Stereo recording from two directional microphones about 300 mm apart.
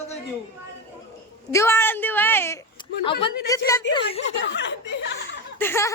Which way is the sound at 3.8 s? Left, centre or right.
Left.